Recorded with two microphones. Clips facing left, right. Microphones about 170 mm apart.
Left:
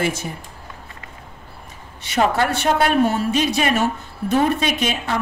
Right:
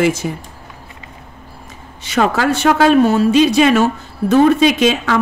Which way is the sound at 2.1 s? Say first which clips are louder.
Right 4 dB; 90° right.